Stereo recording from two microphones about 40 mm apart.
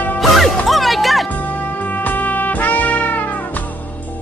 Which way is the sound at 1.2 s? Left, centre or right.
Left.